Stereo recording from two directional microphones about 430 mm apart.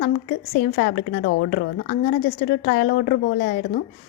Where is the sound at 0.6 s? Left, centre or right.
Left.